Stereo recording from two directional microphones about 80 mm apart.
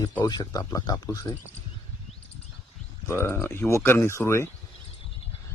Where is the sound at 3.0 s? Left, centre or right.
Left.